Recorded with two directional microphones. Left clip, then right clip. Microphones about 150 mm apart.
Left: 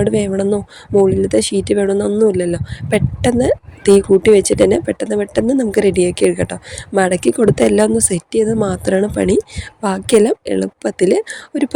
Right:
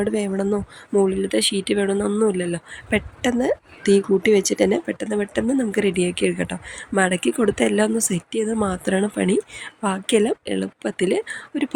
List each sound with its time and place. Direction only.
0.0 s speech: 45° left (ahead or behind)
1.0 s speech: 50° left (ahead or behind)